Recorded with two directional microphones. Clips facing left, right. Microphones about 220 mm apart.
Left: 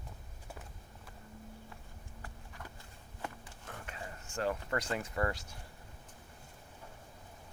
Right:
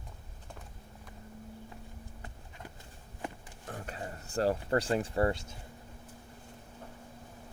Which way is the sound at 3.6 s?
35° right (ahead or behind).